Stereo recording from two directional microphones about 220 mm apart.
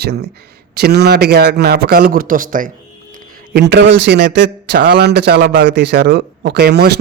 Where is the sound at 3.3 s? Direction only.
50° right (ahead or behind).